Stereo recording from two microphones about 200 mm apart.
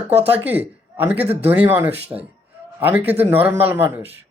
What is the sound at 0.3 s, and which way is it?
A man's voice, 10° right (ahead or behind).